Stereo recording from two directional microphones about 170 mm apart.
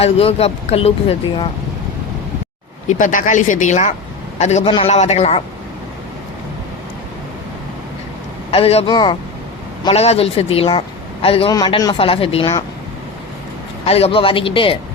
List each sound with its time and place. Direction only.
0.0 s a man's voice: 35° left (ahead or behind)
3.0 s a man's voice: 50° left (ahead or behind)
8.4 s a man's voice: 35° left (ahead or behind)
13.8 s a man's voice: 35° left (ahead or behind)